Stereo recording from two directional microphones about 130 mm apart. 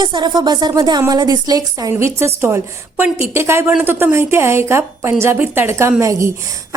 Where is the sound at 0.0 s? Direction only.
35° right (ahead or behind).